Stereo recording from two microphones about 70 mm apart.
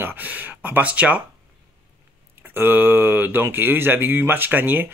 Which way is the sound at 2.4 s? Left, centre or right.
Right.